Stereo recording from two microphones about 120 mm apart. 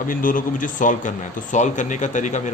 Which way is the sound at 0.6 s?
90° left.